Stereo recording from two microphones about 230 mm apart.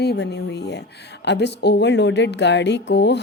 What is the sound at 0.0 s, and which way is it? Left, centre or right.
Speech, left.